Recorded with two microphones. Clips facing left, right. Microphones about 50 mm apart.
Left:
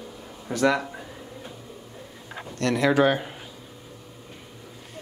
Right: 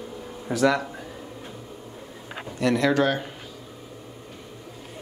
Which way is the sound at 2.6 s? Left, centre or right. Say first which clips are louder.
Even; centre.